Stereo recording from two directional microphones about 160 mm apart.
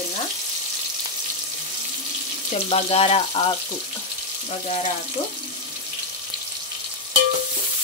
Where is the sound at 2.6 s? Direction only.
35° left (ahead or behind).